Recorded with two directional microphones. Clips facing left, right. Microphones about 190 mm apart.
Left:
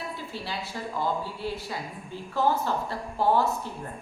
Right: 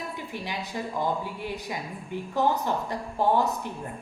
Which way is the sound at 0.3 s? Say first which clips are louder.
Right 1 dB; 15° right (ahead or behind).